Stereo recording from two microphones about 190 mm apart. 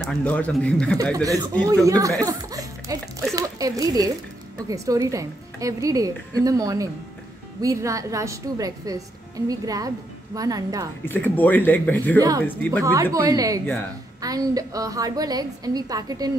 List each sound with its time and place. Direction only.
0.0 s speech: 5° left (ahead or behind)
1.1 s a woman's voice: 20° right (ahead or behind)
11.1 s speech: 10° left (ahead or behind)
12.2 s a woman's voice: 20° right (ahead or behind)